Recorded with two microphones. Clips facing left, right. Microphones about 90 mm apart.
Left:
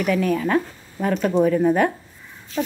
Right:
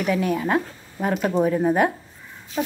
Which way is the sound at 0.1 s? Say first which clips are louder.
Left 2 dB; 25° right (ahead or behind).